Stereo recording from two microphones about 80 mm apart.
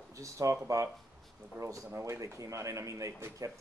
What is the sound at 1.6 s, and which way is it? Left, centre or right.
Speech, right.